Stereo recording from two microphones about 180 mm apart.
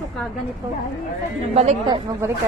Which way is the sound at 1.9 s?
15° right (ahead or behind).